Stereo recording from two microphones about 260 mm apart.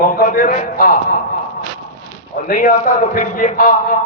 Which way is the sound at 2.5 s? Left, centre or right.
Left.